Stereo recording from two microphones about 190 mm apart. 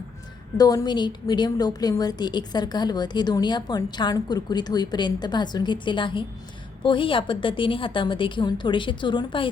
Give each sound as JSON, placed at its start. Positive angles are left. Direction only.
{"t": 0.5, "sound": "a woman's voice", "side_deg": 20}